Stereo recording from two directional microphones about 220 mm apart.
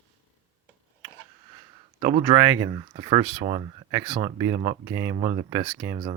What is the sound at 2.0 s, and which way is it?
Speech, 20° right (ahead or behind).